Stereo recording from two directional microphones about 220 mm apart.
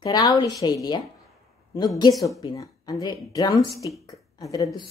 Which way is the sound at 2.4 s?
15° left (ahead or behind).